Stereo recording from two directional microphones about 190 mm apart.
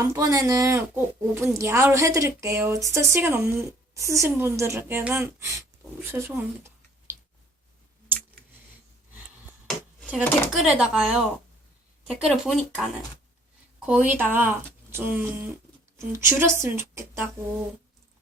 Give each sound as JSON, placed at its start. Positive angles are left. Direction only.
{"t": 0.1, "sound": "speech", "side_deg": -15}
{"t": 9.6, "sound": "a sound", "side_deg": -5}
{"t": 10.6, "sound": "speech", "side_deg": -5}